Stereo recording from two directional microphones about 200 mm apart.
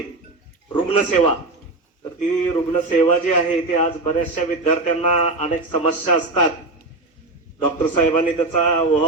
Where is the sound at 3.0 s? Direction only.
35° left (ahead or behind).